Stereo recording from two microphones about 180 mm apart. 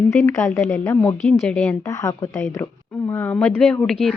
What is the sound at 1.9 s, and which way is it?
Speech, 20° left (ahead or behind).